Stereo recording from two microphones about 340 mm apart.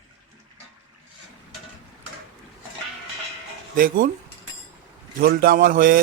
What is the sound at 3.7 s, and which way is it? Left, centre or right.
Speech, right.